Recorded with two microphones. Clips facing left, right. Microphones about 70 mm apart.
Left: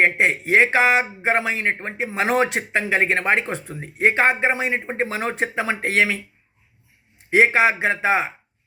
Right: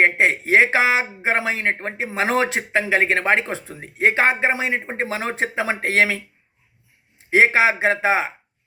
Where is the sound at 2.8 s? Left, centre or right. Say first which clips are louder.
Right 1 dB; right.